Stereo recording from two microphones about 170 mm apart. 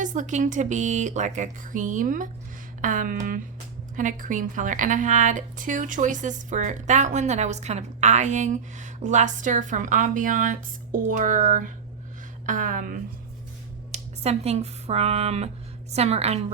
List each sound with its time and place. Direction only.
0.0 s a woman's voice: 50° right (ahead or behind)
13.9 s a woman's voice: 40° right (ahead or behind)